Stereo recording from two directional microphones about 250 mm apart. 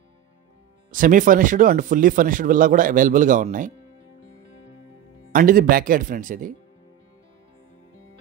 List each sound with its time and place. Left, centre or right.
0.9 s speech: right
5.3 s speech: right